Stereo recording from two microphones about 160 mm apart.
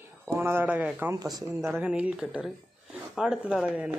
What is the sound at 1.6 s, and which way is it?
Speech, 10° right (ahead or behind).